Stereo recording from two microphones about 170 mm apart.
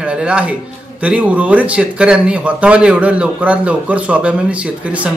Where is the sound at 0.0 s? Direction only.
5° right (ahead or behind).